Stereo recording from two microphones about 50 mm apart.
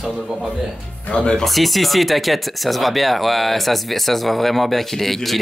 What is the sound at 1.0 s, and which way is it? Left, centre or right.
Speech, left.